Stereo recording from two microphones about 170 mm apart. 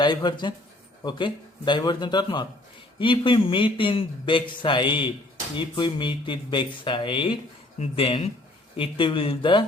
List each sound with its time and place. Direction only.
0.0 s a man's voice: 25° left (ahead or behind)